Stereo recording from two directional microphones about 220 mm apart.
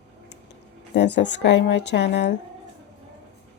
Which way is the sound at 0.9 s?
50° left (ahead or behind).